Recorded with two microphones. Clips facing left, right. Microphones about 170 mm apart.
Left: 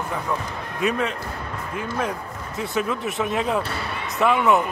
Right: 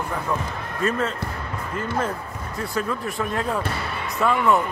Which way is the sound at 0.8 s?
15° left (ahead or behind).